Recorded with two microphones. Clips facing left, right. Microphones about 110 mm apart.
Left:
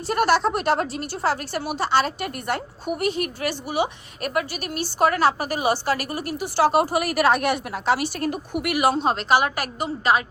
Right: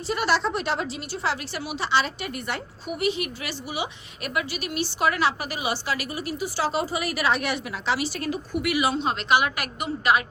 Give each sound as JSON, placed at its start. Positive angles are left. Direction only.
{"t": 0.1, "sound": "a woman's voice", "side_deg": 55}